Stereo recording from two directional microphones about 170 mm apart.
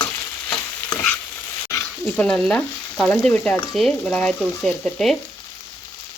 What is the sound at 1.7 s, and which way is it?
Frying, 5° left (ahead or behind).